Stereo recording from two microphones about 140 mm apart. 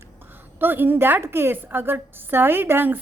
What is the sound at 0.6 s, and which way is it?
A woman's voice, 15° right (ahead or behind).